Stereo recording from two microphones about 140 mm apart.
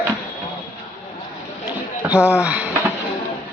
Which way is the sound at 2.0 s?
10° right (ahead or behind).